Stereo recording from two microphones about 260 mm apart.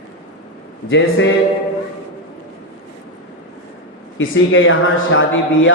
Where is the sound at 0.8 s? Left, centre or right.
Left.